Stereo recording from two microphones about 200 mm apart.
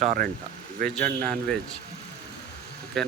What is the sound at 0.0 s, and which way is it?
A man's voice, 40° right (ahead or behind).